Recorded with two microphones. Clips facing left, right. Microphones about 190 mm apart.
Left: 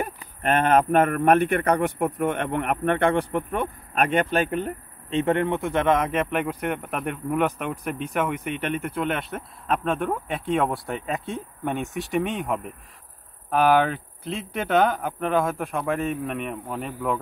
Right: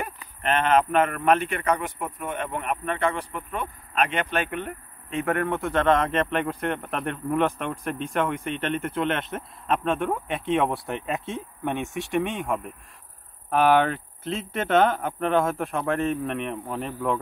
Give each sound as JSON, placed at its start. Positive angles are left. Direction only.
{"t": 0.4, "sound": "a man's voice", "side_deg": 45}